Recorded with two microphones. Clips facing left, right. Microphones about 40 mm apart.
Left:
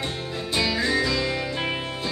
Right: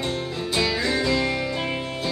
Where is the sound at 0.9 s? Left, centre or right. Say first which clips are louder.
Right 1 dB; right.